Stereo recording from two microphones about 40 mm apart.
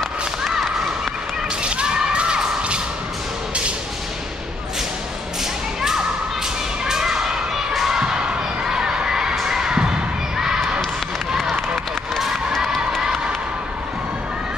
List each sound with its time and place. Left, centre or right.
0.4 s whip: centre
1.6 s a sound: right
5.8 s thump: centre
6.9 s a sound: centre
7.7 s thump: centre
8.0 s a sound: centre
9.8 s basketball bounce: right
10.3 s basketball bounce: centre
13.0 s cheering: centre